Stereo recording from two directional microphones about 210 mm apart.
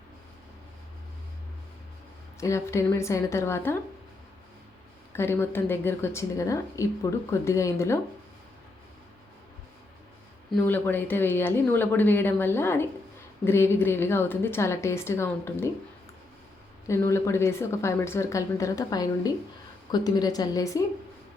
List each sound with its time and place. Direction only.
2.4 s speech: 15° left (ahead or behind)
5.1 s speech: 10° left (ahead or behind)
10.5 s speech: 10° left (ahead or behind)
16.8 s speech: 15° left (ahead or behind)